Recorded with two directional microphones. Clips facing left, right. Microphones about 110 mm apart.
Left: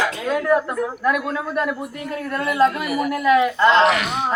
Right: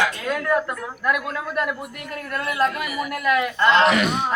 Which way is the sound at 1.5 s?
20° left (ahead or behind).